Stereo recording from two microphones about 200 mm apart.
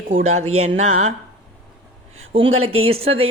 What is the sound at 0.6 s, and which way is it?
Speech, 35° right (ahead or behind).